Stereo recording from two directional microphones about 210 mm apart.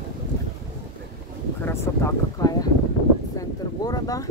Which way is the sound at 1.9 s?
10° left (ahead or behind).